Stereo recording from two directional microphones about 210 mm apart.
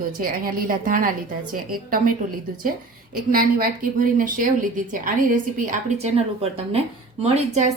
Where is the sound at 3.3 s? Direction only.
45° right (ahead or behind).